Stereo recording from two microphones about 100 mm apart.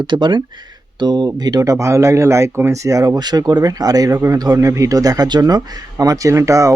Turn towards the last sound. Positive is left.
turn(degrees=-30)  # may be behind; listen again after turning